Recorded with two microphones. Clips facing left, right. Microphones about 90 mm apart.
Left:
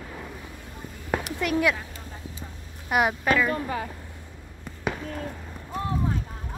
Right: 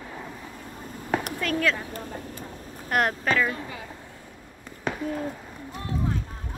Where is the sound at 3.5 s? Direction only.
50° left (ahead or behind).